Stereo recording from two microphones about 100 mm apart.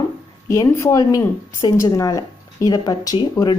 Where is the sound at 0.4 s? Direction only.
30° left (ahead or behind).